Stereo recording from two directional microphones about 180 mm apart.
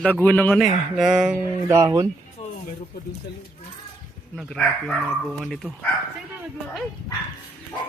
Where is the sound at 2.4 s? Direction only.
40° left (ahead or behind).